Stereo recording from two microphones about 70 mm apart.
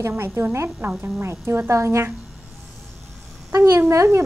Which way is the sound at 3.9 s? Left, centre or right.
Right.